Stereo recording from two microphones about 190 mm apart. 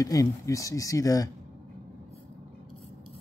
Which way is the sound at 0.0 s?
15° left (ahead or behind).